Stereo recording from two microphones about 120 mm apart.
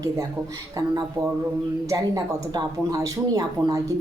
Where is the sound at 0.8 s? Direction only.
25° right (ahead or behind).